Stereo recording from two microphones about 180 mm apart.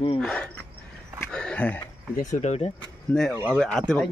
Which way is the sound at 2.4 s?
35° left (ahead or behind).